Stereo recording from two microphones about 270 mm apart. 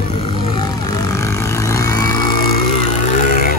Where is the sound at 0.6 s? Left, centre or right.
Centre.